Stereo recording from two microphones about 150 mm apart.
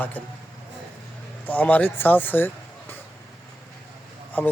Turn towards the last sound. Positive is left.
turn(degrees=10)  # may be behind; listen again after turning